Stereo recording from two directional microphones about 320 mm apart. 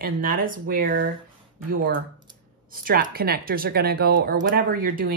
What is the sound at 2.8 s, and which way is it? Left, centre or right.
Speech, right.